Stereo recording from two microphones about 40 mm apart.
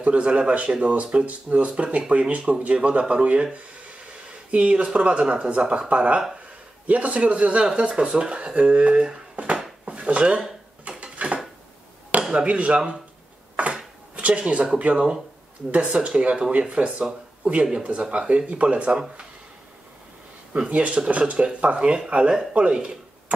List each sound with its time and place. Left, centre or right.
0.0 s speech: right
9.8 s drawer open or close: right
10.9 s a sound: right
12.1 s chop: right
12.4 s speech: right
13.6 s a sound: right
14.1 s speech: right
15.7 s speech: right
20.5 s speech: right